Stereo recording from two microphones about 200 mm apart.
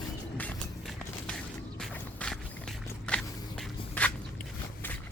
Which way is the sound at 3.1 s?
5° left (ahead or behind).